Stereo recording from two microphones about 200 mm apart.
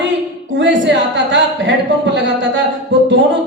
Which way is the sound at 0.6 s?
65° right (ahead or behind).